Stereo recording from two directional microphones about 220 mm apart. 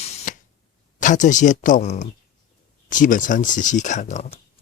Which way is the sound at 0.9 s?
35° left (ahead or behind).